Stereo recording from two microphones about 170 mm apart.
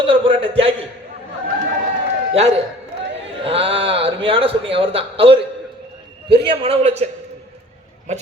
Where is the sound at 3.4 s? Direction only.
35° right (ahead or behind).